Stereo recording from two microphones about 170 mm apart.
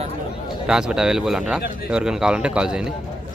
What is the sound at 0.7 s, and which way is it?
Speech, 5° right (ahead or behind).